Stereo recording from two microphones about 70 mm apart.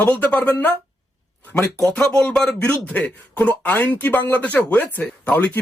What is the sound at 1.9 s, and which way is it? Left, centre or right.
Speech, centre.